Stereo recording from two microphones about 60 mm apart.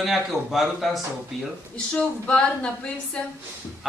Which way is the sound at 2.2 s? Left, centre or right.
Centre.